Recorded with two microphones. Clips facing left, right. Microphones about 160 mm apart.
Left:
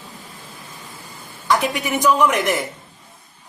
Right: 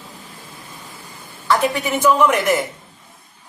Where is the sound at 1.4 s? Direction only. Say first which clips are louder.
Right 2 dB; 15° left (ahead or behind).